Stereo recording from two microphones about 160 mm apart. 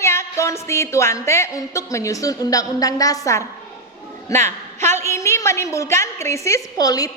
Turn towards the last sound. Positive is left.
turn(degrees=25)  # may be behind; listen again after turning